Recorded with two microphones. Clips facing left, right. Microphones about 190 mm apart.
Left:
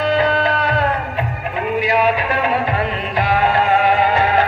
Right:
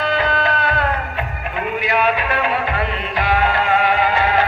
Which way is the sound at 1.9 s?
35° left (ahead or behind).